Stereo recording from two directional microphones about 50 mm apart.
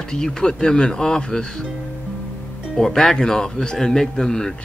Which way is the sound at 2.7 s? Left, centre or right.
Centre.